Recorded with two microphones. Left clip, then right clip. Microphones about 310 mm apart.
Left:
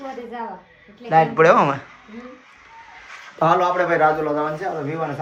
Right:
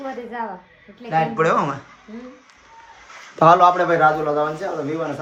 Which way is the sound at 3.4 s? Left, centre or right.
Centre.